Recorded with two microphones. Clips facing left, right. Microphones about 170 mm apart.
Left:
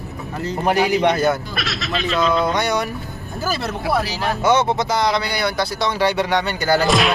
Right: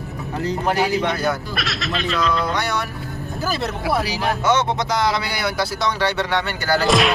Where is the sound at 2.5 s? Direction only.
20° left (ahead or behind).